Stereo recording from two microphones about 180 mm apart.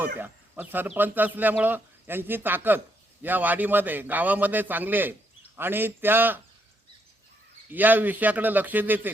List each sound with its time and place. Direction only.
0.2 s speech: 10° right (ahead or behind)
7.7 s speech: 10° right (ahead or behind)